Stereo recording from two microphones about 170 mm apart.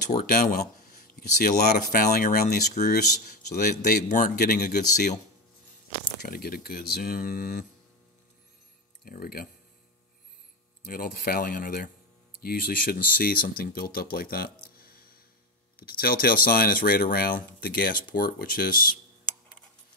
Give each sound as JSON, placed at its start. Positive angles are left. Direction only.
{"t": 0.3, "sound": "speech", "side_deg": 60}
{"t": 6.2, "sound": "speech", "side_deg": 60}
{"t": 9.0, "sound": "speech", "side_deg": 60}
{"t": 10.9, "sound": "speech", "side_deg": 65}
{"t": 14.8, "sound": "music", "side_deg": 60}
{"t": 15.7, "sound": "speech", "side_deg": 60}